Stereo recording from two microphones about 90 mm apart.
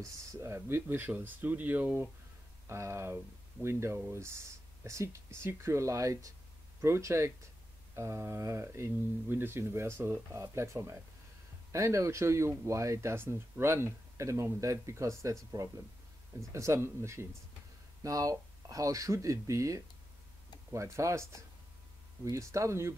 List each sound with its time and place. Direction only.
0.0 s speech: 30° right (ahead or behind)
2.7 s speech: 30° right (ahead or behind)